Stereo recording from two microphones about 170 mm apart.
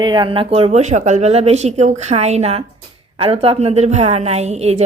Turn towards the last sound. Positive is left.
turn(degrees=-40)  # may be behind; listen again after turning